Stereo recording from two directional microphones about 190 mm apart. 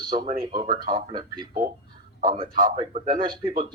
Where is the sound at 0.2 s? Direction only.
25° right (ahead or behind).